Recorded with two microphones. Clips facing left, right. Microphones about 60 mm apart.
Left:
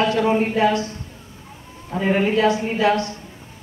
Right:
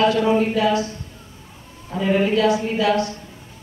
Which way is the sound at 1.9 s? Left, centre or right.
Left.